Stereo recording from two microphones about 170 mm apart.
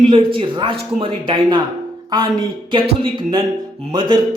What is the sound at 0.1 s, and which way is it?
A woman's voice, 30° right (ahead or behind).